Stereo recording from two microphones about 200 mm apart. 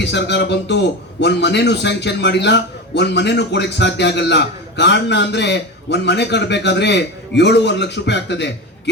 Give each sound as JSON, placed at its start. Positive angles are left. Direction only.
{"t": 0.0, "sound": "a man's voice", "side_deg": 60}